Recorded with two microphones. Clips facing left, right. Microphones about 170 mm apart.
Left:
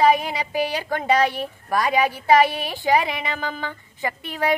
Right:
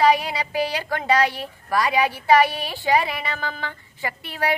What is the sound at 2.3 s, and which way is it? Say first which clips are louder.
Speech: left 1 dB; 20° left (ahead or behind).